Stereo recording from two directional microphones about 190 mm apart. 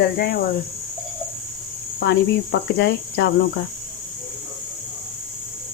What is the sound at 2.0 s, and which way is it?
Speech, 65° left (ahead or behind).